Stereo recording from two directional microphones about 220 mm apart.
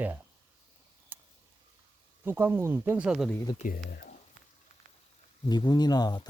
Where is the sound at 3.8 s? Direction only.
45° left (ahead or behind).